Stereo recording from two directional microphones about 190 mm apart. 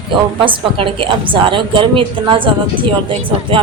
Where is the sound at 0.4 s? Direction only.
25° right (ahead or behind).